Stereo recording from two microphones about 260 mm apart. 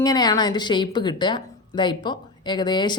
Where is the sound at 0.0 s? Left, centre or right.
Centre.